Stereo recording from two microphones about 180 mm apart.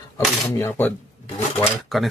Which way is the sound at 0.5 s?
10° left (ahead or behind).